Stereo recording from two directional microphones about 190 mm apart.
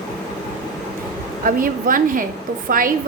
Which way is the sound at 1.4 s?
45° right (ahead or behind).